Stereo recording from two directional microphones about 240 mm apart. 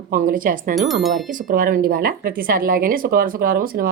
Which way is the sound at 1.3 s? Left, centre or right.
Right.